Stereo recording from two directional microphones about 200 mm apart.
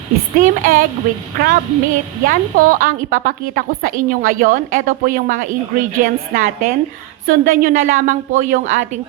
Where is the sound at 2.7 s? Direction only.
45° right (ahead or behind).